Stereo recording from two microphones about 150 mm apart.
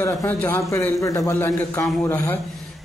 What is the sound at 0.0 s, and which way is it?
A man's voice, 15° left (ahead or behind).